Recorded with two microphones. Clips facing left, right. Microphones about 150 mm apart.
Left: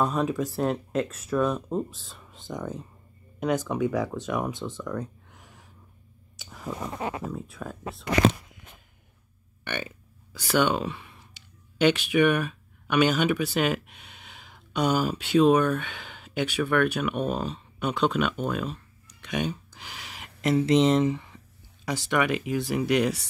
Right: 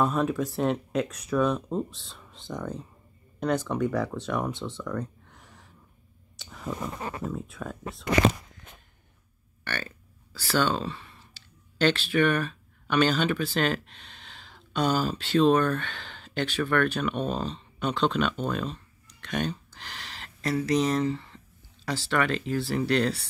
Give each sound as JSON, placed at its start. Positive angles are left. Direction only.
{"t": 0.0, "sound": "speech", "side_deg": 0}
{"t": 4.6, "sound": "a sound", "side_deg": 0}
{"t": 7.2, "sound": "speech", "side_deg": 0}
{"t": 9.7, "sound": "speech", "side_deg": 15}
{"t": 20.5, "sound": "speech", "side_deg": 25}